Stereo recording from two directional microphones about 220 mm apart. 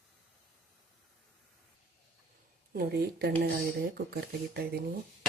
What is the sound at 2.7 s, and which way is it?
Speech, 45° right (ahead or behind).